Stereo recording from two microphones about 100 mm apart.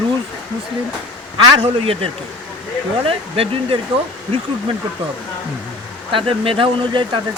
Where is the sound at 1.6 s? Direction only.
70° right (ahead or behind).